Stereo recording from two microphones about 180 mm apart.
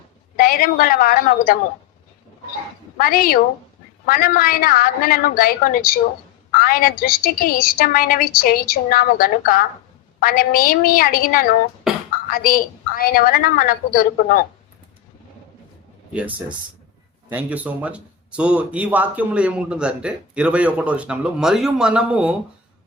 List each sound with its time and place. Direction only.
0.3 s a woman's voice: 55° left (ahead or behind)
3.0 s a woman's voice: 55° left (ahead or behind)
11.9 s a sound: centre (ahead or behind)
12.3 s a woman's voice: 55° left (ahead or behind)
16.1 s speech: 5° right (ahead or behind)